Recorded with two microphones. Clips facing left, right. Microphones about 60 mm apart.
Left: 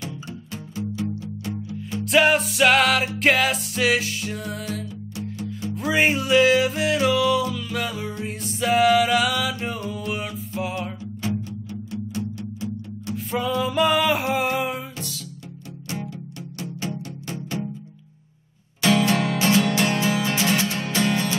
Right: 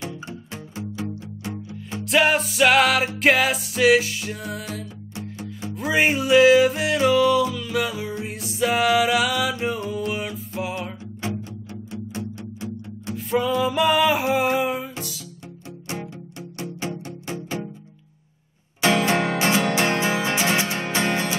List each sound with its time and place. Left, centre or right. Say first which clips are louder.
0.5 s music: left 6 dB; right
2.0 s music: left 1 dB; centre
13.1 s music: right 3 dB; centre
16.8 s music: even; right
18.8 s music: even; right